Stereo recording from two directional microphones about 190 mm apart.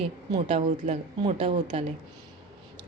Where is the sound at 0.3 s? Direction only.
35° right (ahead or behind).